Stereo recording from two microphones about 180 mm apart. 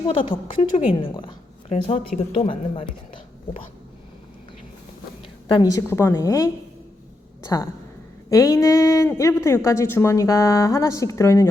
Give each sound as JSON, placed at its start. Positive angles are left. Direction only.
{"t": 0.0, "sound": "speech", "side_deg": 30}
{"t": 5.5, "sound": "speech", "side_deg": 25}
{"t": 5.9, "sound": "a woman's voice", "side_deg": 15}